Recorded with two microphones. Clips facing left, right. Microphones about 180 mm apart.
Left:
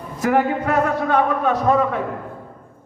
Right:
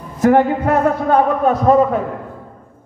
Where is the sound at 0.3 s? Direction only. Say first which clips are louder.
Right 4 dB; 40° right (ahead or behind).